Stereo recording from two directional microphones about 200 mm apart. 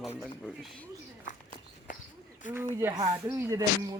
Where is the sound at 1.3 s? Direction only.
40° left (ahead or behind).